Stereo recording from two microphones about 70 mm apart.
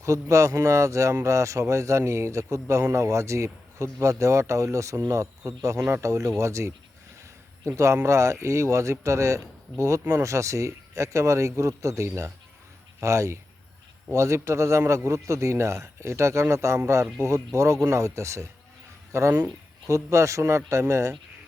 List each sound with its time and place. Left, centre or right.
0.0 s a man's voice: right
8.0 s a man's voice: right